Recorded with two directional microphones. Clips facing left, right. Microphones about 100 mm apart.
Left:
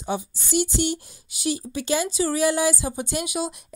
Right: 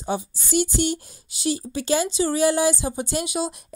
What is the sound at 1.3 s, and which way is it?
Speech, 30° right (ahead or behind).